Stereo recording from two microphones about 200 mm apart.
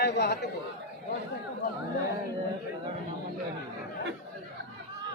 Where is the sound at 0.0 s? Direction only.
55° left (ahead or behind).